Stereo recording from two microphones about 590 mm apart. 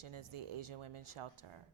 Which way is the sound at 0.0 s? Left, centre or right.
Right.